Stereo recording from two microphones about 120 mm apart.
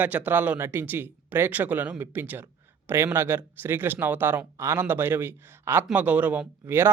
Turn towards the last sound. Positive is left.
turn(degrees=-20)  # may be behind; listen again after turning